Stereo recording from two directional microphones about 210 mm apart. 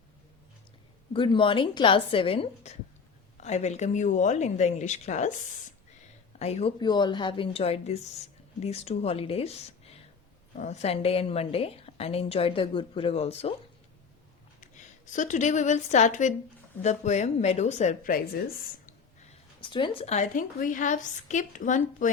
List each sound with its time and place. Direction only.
1.1 s a woman's voice: 25° left (ahead or behind)
6.4 s a woman's voice: 30° left (ahead or behind)
15.1 s a woman's voice: 35° left (ahead or behind)
19.6 s a woman's voice: 25° left (ahead or behind)